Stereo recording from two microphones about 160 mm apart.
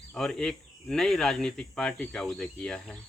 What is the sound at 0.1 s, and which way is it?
Speech, 5° left (ahead or behind).